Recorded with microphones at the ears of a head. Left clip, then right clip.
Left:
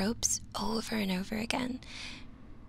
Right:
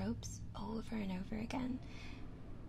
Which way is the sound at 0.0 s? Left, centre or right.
Left.